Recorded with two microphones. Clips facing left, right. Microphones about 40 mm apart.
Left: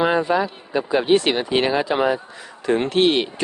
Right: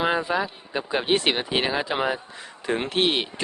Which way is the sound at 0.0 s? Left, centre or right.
Centre.